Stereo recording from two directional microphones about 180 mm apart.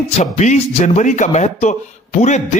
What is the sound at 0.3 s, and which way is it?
A man's voice, 40° left (ahead or behind).